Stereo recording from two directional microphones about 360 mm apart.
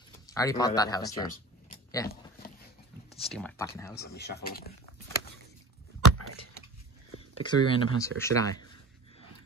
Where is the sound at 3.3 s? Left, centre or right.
Centre.